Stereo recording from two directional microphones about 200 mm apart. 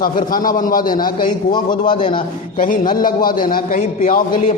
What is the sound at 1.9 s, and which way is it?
Speech, 25° left (ahead or behind).